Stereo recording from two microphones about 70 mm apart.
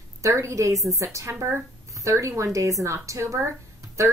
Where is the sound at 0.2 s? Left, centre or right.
Right.